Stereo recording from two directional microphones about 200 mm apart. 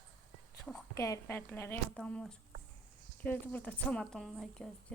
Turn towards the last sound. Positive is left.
turn(degrees=0)  # may be behind; listen again after turning